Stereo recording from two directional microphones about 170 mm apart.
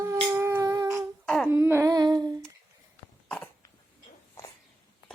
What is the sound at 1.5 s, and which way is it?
Humming, 10° right (ahead or behind).